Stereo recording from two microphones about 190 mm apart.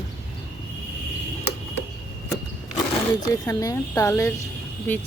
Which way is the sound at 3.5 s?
15° left (ahead or behind).